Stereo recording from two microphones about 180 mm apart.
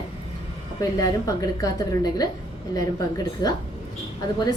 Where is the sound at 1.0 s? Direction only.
20° left (ahead or behind).